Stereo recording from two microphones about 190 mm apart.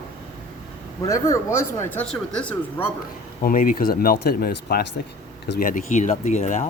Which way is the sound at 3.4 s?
45° left (ahead or behind).